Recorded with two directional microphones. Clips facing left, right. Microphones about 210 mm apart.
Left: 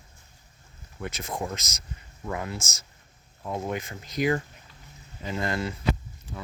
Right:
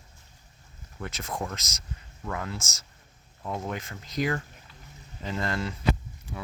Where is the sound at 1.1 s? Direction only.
15° left (ahead or behind).